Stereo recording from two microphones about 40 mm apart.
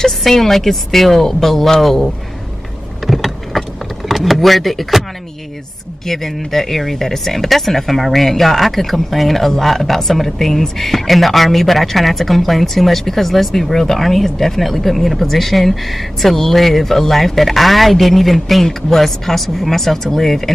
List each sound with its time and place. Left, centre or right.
0.0 s speech: centre
3.1 s vehicle: centre
4.1 s speech: centre
6.0 s speech: centre